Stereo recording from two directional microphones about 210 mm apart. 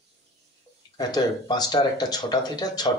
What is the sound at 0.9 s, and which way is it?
Speech, 20° left (ahead or behind).